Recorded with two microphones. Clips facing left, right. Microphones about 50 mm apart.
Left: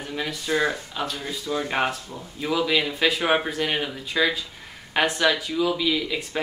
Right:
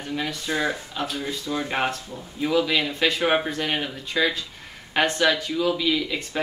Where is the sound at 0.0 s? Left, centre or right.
Centre.